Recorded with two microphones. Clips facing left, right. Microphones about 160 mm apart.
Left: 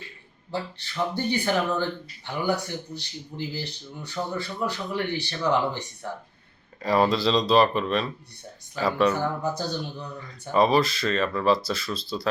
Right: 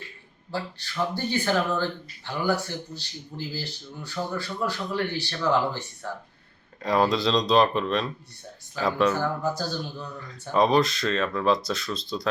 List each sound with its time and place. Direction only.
0.5 s speech: 20° left (ahead or behind)
6.8 s speech: centre (ahead or behind)
9.1 s speech: 20° left (ahead or behind)
10.5 s speech: centre (ahead or behind)